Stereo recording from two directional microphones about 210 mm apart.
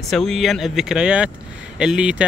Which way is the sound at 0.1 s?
Centre (ahead or behind).